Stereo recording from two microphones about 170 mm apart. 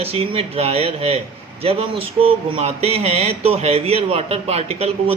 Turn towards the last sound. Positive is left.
turn(degrees=-35)  # may be behind; listen again after turning